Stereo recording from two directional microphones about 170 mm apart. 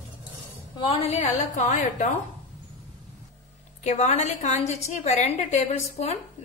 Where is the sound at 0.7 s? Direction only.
30° left (ahead or behind); by 2.0 s 50° left (ahead or behind).